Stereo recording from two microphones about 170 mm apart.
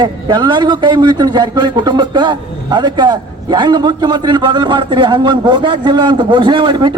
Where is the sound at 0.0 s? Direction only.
25° right (ahead or behind).